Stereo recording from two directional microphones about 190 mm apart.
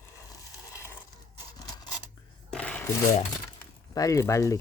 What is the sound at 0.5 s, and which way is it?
Mechanisms, 15° left (ahead or behind).